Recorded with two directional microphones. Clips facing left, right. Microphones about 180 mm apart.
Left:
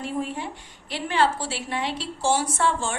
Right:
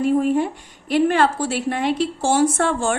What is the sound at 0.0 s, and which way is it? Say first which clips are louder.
A woman's voice: right 11 dB; 50° right (ahead or behind).